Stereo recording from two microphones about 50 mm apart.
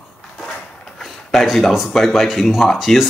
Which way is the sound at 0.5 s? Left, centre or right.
Centre.